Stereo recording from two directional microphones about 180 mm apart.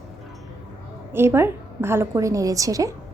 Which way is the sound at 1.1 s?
15° right (ahead or behind).